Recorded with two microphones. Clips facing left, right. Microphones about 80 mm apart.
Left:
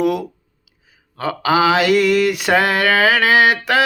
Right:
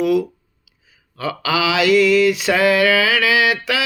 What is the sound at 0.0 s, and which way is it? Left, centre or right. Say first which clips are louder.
Speech: right 1 dB; left.